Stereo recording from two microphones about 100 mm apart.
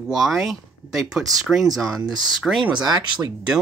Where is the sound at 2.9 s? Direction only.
40° right (ahead or behind).